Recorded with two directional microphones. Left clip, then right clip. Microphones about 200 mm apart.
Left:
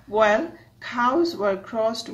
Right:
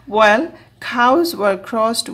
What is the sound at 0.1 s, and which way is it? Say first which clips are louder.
Speech: right 7 dB; 40° right (ahead or behind).